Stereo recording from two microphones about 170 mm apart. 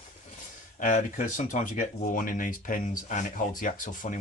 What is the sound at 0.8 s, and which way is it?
Speech, 50° left (ahead or behind).